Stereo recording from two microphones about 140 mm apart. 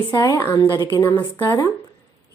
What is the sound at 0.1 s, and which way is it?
Speech, 25° left (ahead or behind).